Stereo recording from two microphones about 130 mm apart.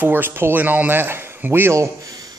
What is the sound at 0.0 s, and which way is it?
Speech, 15° right (ahead or behind).